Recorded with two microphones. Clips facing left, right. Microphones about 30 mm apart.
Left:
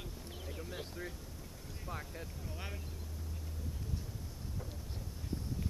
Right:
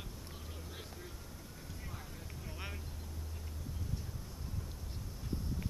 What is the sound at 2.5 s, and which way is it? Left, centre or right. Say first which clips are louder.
Vehicle: right 1 dB; centre.